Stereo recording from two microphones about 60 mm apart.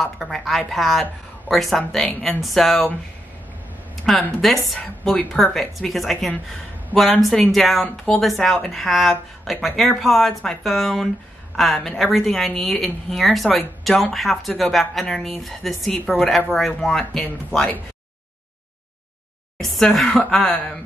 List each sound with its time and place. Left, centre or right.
0.0 s speech: centre
3.9 s speech: centre
19.6 s speech: centre